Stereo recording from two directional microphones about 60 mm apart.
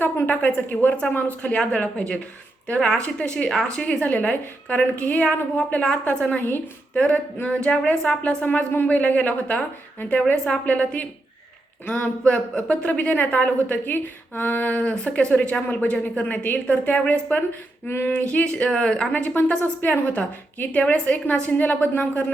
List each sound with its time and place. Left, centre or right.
0.0 s speech: left
17.8 s female singing: left
18.1 s speech: left
19.1 s speech: left